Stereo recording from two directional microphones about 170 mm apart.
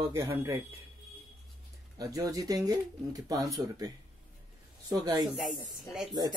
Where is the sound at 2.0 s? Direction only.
20° right (ahead or behind).